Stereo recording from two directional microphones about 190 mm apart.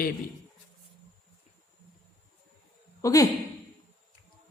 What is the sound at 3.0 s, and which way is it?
Speech, 15° left (ahead or behind).